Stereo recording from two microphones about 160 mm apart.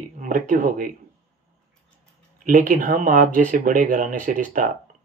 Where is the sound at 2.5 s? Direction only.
60° right (ahead or behind).